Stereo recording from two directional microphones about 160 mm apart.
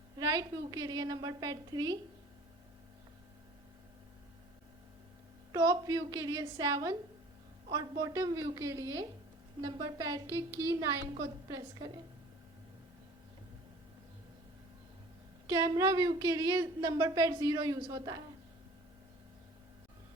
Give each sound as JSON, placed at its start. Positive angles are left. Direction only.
{"t": 0.2, "sound": "a woman's voice", "side_deg": -25}
{"t": 5.5, "sound": "a woman's voice", "side_deg": -25}
{"t": 10.5, "sound": "a woman's voice", "side_deg": -15}
{"t": 15.4, "sound": "a woman's voice", "side_deg": -20}